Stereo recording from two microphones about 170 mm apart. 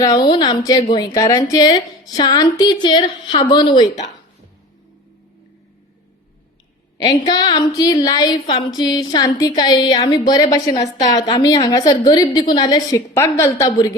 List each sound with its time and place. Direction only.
0.0 s a woman's voice: 25° left (ahead or behind)
7.0 s a woman's voice: 25° left (ahead or behind)